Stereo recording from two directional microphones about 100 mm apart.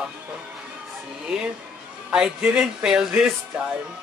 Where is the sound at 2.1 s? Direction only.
10° right (ahead or behind).